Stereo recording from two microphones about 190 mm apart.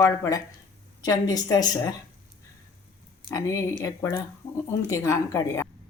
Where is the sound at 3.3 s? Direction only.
15° left (ahead or behind).